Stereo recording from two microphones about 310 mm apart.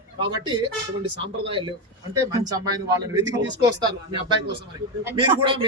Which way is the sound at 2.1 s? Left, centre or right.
Centre.